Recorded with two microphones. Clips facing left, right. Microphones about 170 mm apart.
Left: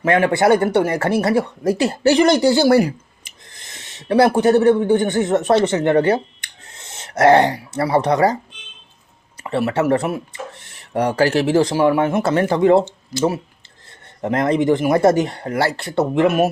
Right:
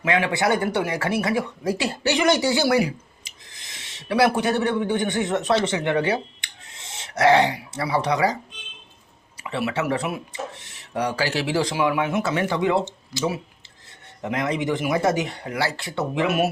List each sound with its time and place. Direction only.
0.0 s speech: 45° left (ahead or behind)
9.4 s speech: 50° left (ahead or behind)